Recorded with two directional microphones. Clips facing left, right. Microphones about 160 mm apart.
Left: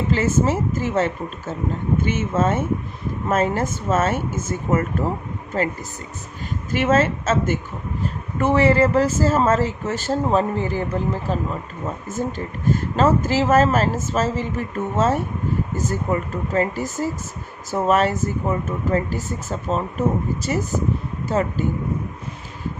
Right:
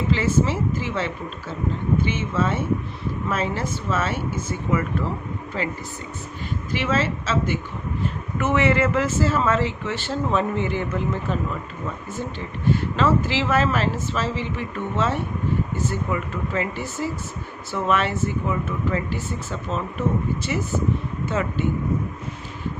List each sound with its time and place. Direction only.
0.1 s speech: 45° left (ahead or behind)
8.0 s speech: 35° left (ahead or behind)